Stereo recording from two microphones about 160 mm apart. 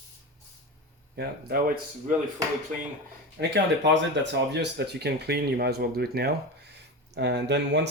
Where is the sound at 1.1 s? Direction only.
80° right.